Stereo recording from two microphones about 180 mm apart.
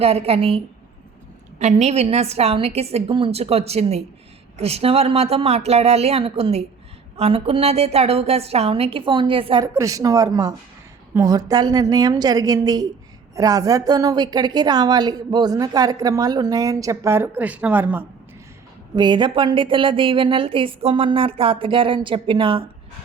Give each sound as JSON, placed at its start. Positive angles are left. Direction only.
{"t": 0.0, "sound": "a woman's voice", "side_deg": -35}
{"t": 9.7, "sound": "a woman's voice", "side_deg": -20}
{"t": 18.9, "sound": "a woman's voice", "side_deg": -25}